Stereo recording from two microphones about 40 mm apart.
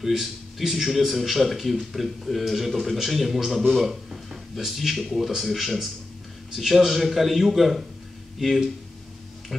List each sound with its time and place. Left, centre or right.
0.0 s speech: centre